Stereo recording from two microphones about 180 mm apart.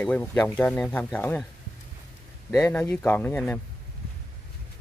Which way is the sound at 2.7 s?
5° left (ahead or behind).